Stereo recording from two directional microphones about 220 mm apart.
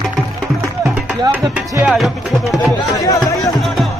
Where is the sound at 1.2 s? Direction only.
10° right (ahead or behind).